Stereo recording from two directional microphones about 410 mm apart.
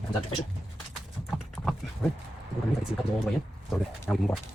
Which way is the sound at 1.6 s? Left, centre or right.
Centre.